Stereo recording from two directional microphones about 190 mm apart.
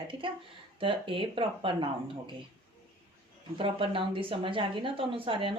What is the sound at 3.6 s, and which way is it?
Speech, 30° right (ahead or behind).